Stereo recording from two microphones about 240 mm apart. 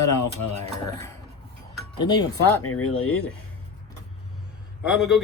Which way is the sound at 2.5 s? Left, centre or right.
Left.